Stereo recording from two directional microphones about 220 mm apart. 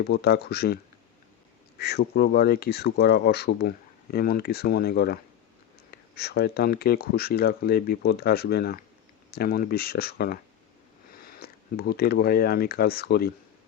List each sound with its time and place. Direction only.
0.1 s speech: 45° left (ahead or behind)
1.8 s speech: 45° left (ahead or behind)